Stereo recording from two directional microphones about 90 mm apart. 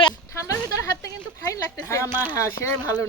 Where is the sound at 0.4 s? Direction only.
35° left (ahead or behind).